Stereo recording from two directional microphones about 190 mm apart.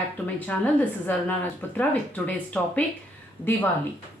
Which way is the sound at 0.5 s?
10° left (ahead or behind).